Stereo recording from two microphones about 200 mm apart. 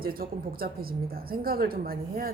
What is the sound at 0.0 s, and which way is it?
Speech, 50° right (ahead or behind).